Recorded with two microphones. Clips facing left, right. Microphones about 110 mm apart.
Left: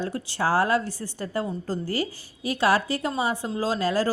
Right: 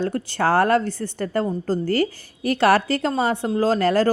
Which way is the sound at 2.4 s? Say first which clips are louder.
Right 5 dB; 65° right (ahead or behind).